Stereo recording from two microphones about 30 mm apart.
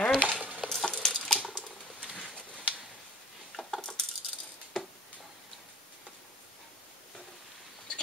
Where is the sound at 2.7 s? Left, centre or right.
Right.